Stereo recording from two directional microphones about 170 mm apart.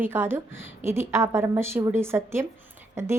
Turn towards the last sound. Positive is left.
turn(degrees=-15)  # may be behind; listen again after turning